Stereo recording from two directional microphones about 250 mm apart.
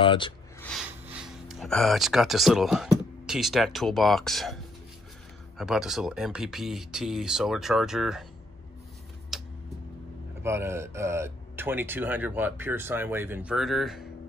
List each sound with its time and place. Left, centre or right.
0.0 s speech: centre
0.6 s speech: centre
5.6 s speech: centre
9.3 s tick-tock: centre
10.4 s speech: centre